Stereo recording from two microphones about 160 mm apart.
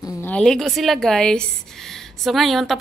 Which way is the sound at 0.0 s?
10° left (ahead or behind).